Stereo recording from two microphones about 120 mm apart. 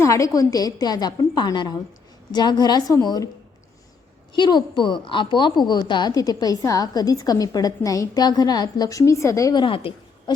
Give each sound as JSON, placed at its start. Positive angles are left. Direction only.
{"t": 0.0, "sound": "a woman's voice", "side_deg": 25}
{"t": 4.4, "sound": "a woman's voice", "side_deg": 40}
{"t": 9.6, "sound": "a woman's voice", "side_deg": 50}